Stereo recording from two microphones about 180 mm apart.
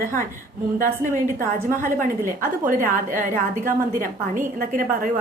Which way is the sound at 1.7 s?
50° right (ahead or behind).